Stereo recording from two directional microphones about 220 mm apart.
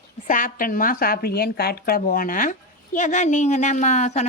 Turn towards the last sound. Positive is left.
turn(degrees=30)  # may be behind; listen again after turning